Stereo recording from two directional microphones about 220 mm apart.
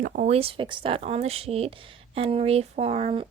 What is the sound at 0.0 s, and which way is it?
A woman's voice, 35° right (ahead or behind).